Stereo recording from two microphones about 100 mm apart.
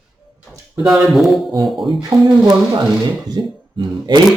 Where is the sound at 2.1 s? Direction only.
35° right (ahead or behind).